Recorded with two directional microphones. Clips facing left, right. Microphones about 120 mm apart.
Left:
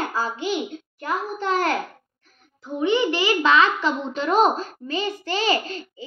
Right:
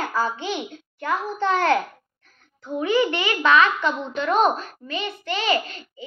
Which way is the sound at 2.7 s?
25° left (ahead or behind).